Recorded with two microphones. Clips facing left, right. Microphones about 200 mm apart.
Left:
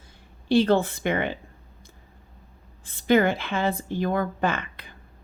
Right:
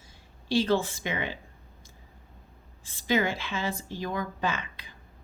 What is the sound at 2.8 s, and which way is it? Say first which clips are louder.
A woman's voice: left 7 dB; 55° left (ahead or behind).